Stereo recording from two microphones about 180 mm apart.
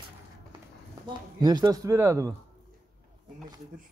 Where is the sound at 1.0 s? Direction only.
25° right (ahead or behind).